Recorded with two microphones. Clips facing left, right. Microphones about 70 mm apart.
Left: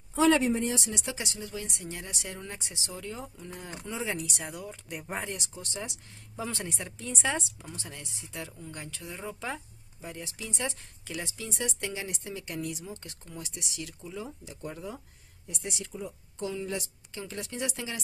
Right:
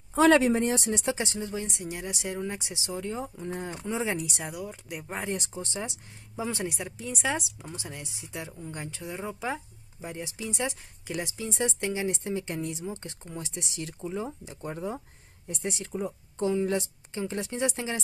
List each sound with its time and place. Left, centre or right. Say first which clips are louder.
0.1 s speech: right 3 dB; right
0.7 s speech: right 5 dB; right
4.5 s speech: right 3 dB; centre
5.3 s speech: right 6 dB; right
5.6 s speech: right 4 dB; right
6.3 s speech: right 4 dB; centre; by 18.0 s right